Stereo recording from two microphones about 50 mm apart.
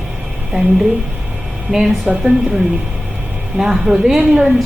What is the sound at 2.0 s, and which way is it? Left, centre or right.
Speech, right.